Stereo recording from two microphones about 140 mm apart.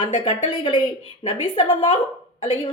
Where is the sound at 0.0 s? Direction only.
35° left (ahead or behind).